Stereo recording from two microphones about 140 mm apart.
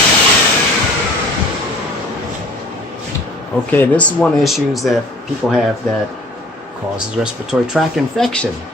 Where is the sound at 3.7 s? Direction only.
10° left (ahead or behind).